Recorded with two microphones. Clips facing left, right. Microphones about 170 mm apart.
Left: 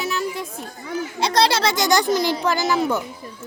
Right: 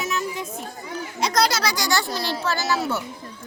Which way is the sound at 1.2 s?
30° left (ahead or behind).